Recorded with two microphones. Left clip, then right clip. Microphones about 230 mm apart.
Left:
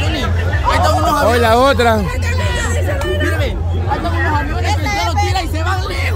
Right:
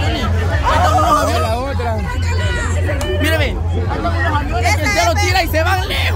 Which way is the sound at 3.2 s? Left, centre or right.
Right.